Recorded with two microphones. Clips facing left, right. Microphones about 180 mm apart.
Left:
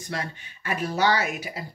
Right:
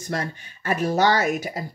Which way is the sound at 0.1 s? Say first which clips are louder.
Right 5 dB; 45° right (ahead or behind).